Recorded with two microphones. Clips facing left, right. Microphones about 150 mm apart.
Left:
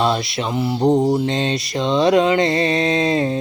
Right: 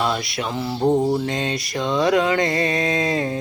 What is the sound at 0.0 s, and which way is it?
Mantra, 25° left (ahead or behind).